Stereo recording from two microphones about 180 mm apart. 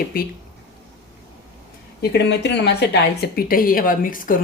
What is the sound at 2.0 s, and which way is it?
Speech, 65° left (ahead or behind).